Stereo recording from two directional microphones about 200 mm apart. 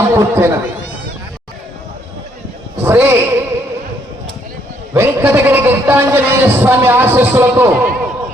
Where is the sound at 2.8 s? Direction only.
10° right (ahead or behind).